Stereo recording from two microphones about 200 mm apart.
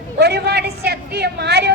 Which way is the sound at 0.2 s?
55° right (ahead or behind).